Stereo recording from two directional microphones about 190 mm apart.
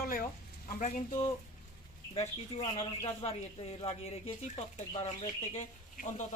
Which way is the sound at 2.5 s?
30° left (ahead or behind).